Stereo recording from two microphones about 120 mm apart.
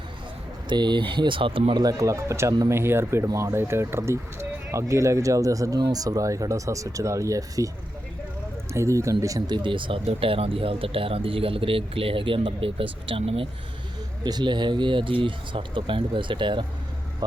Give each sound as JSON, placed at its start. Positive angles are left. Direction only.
{"t": 0.7, "sound": "speech", "side_deg": -40}
{"t": 1.8, "sound": "speech", "side_deg": -30}
{"t": 8.7, "sound": "speech", "side_deg": -25}
{"t": 9.6, "sound": "speech", "side_deg": -45}
{"t": 14.3, "sound": "speech", "side_deg": -40}